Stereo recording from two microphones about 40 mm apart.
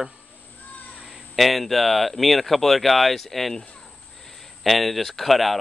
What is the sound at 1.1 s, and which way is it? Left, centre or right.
Speech, centre.